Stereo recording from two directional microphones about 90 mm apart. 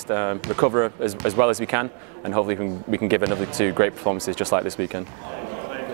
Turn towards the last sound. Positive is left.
turn(degrees=-15)  # may be behind; listen again after turning